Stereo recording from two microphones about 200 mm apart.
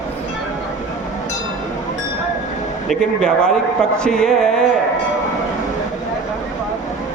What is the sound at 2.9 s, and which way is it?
A man's voice, 5° left (ahead or behind).